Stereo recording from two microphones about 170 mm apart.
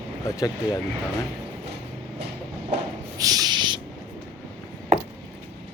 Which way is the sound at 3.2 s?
20° right (ahead or behind).